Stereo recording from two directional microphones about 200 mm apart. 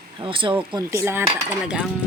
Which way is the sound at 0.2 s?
25° right (ahead or behind).